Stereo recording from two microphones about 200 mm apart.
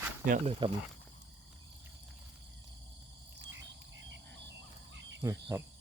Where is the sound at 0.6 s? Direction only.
25° right (ahead or behind).